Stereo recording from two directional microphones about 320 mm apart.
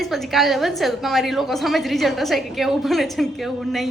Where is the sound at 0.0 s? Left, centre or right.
Centre.